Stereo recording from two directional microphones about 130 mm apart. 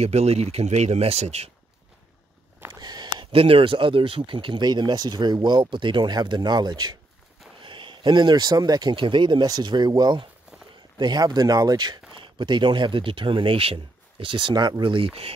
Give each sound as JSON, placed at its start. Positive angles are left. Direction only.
{"t": 0.0, "sound": "speech", "side_deg": -55}
{"t": 2.7, "sound": "speech", "side_deg": -30}